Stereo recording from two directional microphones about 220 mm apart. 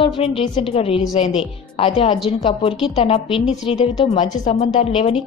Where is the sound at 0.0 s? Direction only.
25° left (ahead or behind).